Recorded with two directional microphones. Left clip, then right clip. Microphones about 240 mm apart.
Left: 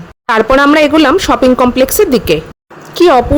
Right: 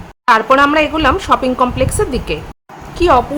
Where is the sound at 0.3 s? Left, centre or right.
Left.